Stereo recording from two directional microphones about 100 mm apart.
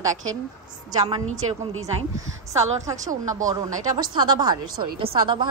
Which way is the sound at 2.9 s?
35° right (ahead or behind).